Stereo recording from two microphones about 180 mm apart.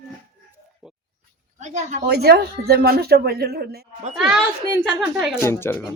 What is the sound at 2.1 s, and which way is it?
Speech, 60° right (ahead or behind).